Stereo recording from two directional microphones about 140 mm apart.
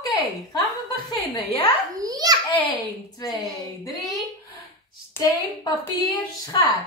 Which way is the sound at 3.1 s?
25° left (ahead or behind).